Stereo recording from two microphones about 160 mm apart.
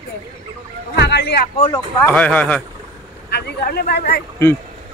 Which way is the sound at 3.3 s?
85° left.